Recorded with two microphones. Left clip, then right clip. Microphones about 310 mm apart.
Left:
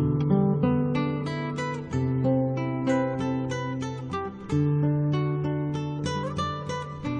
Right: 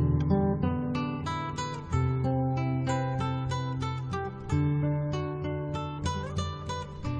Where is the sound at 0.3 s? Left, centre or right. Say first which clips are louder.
Left 4 dB; right.